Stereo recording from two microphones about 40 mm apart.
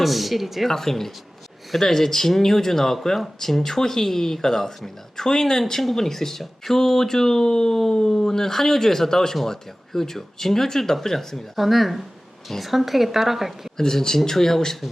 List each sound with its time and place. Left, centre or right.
0.0 s a woman's voice: centre
0.7 s speech: centre
11.5 s a woman's voice: centre
13.7 s speech: centre